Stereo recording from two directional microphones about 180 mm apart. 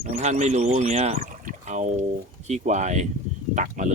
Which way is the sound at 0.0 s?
40° right (ahead or behind).